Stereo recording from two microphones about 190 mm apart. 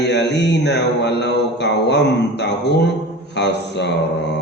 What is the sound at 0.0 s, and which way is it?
Mantra, 60° left (ahead or behind).